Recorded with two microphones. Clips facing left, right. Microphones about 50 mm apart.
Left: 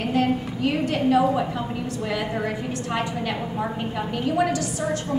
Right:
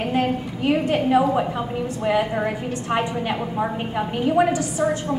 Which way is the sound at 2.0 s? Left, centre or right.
Right.